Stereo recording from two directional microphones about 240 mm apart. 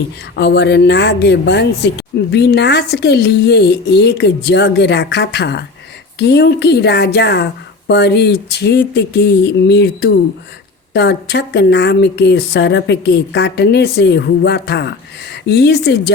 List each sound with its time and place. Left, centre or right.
0.3 s speech: left